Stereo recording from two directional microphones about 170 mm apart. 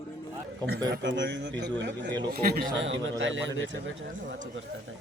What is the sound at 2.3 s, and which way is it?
Speech, 60° right (ahead or behind).